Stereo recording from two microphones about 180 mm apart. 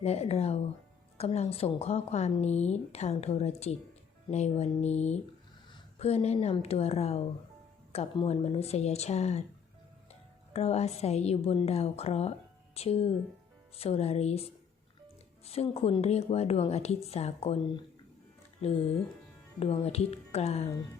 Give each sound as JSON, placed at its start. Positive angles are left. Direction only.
{"t": 0.0, "sound": "a woman's voice", "side_deg": 35}
{"t": 10.5, "sound": "a woman's voice", "side_deg": 35}
{"t": 18.6, "sound": "a woman's voice", "side_deg": 35}